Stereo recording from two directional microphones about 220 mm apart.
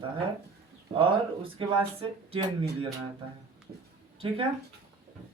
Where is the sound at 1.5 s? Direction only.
25° right (ahead or behind).